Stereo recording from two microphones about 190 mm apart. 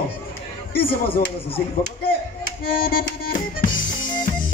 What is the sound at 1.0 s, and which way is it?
Speech, 30° left (ahead or behind).